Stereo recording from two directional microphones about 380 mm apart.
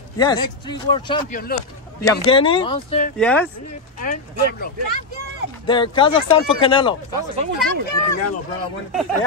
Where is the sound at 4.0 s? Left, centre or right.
Left.